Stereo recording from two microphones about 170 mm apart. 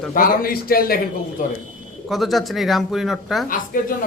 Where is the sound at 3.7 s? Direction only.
55° left (ahead or behind).